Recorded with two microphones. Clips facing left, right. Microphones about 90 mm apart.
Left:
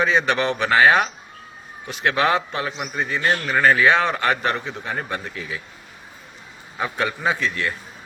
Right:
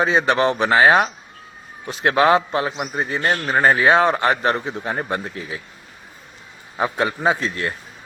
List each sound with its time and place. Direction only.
0.0 s a man's voice: 35° right (ahead or behind)
6.7 s a man's voice: 30° right (ahead or behind)